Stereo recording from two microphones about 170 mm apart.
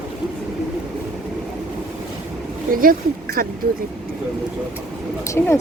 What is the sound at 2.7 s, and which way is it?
Speech, 55° right (ahead or behind).